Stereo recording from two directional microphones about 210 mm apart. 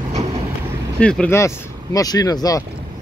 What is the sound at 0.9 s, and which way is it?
Speech, 5° left (ahead or behind).